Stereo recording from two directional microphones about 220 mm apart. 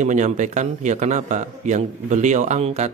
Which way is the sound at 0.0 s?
35° right (ahead or behind).